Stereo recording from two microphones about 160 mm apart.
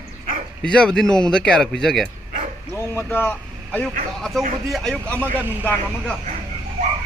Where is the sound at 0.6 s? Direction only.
5° left (ahead or behind).